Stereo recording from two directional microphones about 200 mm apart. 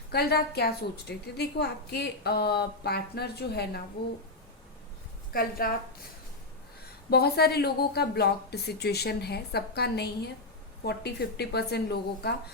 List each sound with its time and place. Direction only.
0.1 s a woman's voice: 50° left (ahead or behind)
5.3 s a woman's voice: 45° left (ahead or behind)
7.1 s a woman's voice: 55° left (ahead or behind)